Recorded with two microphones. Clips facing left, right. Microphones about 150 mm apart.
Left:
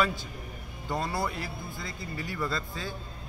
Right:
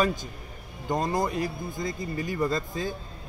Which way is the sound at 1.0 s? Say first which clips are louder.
Right 6 dB; 45° right (ahead or behind).